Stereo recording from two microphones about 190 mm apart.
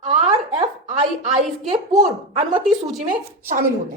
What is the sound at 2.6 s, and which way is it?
Speech, centre (ahead or behind).